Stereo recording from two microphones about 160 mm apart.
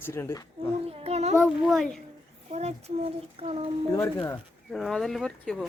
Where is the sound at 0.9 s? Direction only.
40° right (ahead or behind).